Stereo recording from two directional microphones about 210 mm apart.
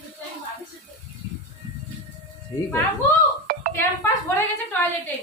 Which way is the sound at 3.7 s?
10° left (ahead or behind).